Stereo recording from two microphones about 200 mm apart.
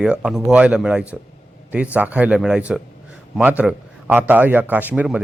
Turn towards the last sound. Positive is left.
turn(degrees=-5)  # may be behind; listen again after turning